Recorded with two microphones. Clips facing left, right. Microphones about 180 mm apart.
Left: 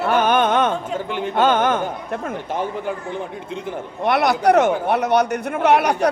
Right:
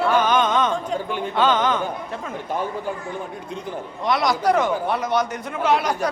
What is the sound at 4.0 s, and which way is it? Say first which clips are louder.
A man's voice: left 4 dB; 65° left (ahead or behind).